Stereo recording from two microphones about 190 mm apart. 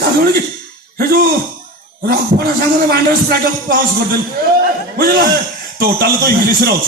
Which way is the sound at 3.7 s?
55° right (ahead or behind).